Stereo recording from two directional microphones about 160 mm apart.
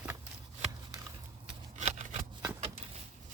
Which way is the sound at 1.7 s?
45° right (ahead or behind).